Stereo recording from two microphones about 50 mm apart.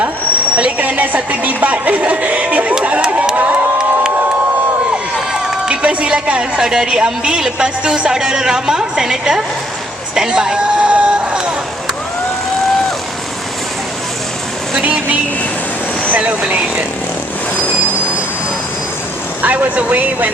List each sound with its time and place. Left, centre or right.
0.5 s a sound: right
2.8 s crowd: right
3.3 s crowd: right
5.3 s crowd: right
6.6 s speech: centre
10.6 s a sound: right
14.8 s speech: right
19.4 s speech: right